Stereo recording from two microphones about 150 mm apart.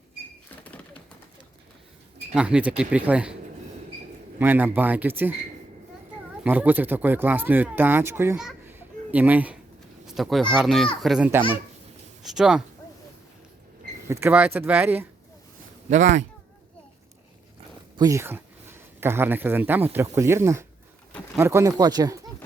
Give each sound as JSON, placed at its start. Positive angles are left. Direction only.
{"t": 2.3, "sound": "speech", "side_deg": -5}
{"t": 4.4, "sound": "speech", "side_deg": -15}
{"t": 6.4, "sound": "speech", "side_deg": -10}
{"t": 8.4, "sound": "a sound", "side_deg": -5}
{"t": 10.1, "sound": "speech", "side_deg": 0}
{"t": 14.1, "sound": "speech", "side_deg": -15}
{"t": 15.9, "sound": "speech", "side_deg": -55}
{"t": 17.9, "sound": "speech", "side_deg": -20}